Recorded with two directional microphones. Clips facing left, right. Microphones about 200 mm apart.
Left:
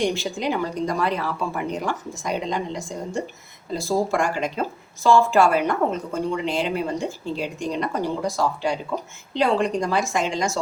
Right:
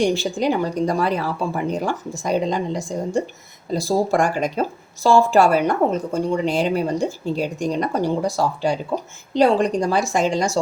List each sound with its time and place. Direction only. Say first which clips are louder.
0.0 s a woman's voice: right 4 dB; 35° right (ahead or behind)